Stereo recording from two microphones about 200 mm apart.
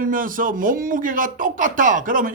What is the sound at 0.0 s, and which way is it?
Speech, 45° right (ahead or behind).